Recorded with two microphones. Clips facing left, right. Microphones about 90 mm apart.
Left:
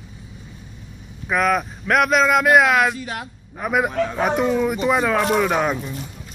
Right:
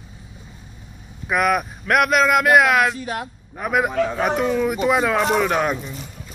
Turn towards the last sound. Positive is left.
turn(degrees=0)  # may be behind; listen again after turning